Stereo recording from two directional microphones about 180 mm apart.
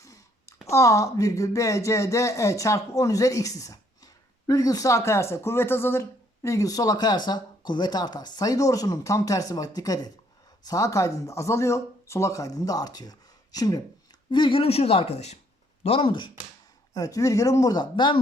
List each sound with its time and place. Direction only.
0.7 s speech: 15° left (ahead or behind)